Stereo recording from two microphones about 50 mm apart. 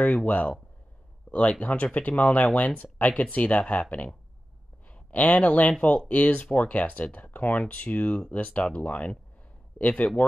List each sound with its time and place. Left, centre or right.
0.0 s speech: left
4.8 s speech: left